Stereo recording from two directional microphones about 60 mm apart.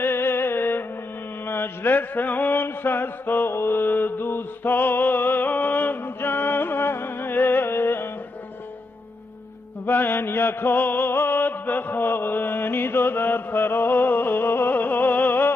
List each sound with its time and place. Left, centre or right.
0.0 s music: left
1.4 s mantra: left
9.8 s chant: left